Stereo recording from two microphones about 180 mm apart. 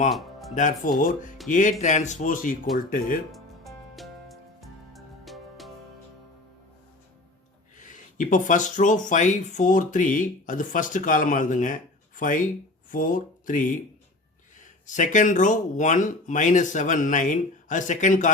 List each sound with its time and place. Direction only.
0.1 s music: centre (ahead or behind)
0.5 s speech: 45° left (ahead or behind)
3.3 s music: centre (ahead or behind)
7.8 s speech: 45° left (ahead or behind)